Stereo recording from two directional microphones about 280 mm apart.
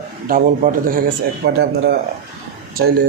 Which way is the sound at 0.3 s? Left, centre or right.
Right.